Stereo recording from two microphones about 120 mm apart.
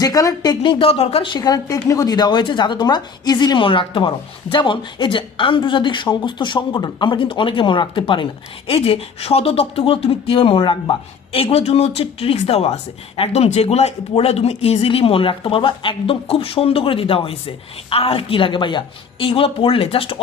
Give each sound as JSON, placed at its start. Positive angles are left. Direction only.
{"t": 0.0, "sound": "a woman's voice", "side_deg": 30}
{"t": 0.6, "sound": "speech", "side_deg": 50}